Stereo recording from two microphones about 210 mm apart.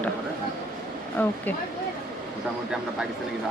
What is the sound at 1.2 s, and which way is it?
Speech, 10° left (ahead or behind).